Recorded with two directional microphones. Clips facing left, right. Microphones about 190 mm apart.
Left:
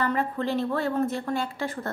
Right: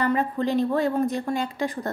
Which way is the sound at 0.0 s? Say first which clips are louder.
Right 3 dB; 15° right (ahead or behind).